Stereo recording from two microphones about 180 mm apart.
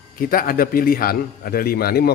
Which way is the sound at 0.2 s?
55° left (ahead or behind).